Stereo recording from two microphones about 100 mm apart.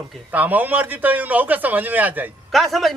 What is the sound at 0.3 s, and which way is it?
A man's voice, 15° right (ahead or behind).